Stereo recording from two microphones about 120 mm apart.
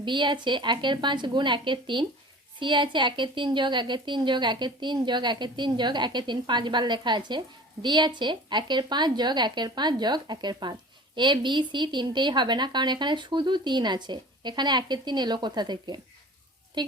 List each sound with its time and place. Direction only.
0.0 s a woman's voice: 40° right (ahead or behind)